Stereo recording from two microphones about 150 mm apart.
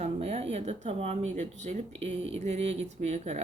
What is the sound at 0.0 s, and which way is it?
Speech, 45° right (ahead or behind).